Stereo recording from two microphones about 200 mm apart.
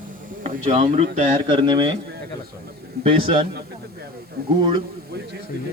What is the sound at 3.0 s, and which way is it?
Speech, 25° right (ahead or behind).